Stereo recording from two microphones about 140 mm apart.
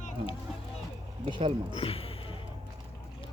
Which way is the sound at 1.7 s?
45° left (ahead or behind).